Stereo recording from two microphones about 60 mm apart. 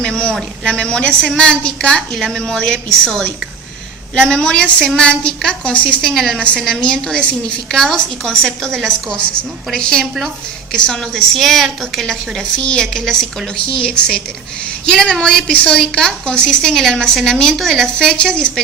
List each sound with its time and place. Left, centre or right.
0.0 s a man's voice: centre
6.0 s a woman's voice: centre